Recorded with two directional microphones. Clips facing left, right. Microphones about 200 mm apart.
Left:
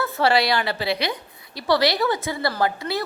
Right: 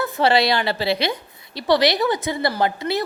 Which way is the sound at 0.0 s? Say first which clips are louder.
Right 2 dB; 20° right (ahead or behind).